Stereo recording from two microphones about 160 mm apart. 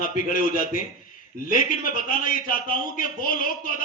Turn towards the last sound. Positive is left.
turn(degrees=60)  # may be behind; listen again after turning